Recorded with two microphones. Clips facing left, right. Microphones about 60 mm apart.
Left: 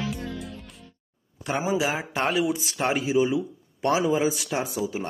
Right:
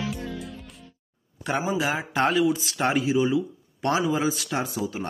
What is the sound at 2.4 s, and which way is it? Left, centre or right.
Speech, centre.